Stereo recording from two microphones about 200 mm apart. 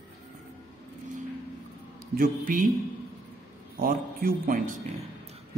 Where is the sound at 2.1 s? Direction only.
45° right (ahead or behind).